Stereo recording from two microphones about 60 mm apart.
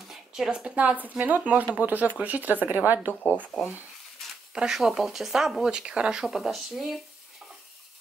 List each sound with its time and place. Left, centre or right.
0.1 s a sound: centre
0.7 s speech: right
3.1 s speech: left
4.6 s speech: centre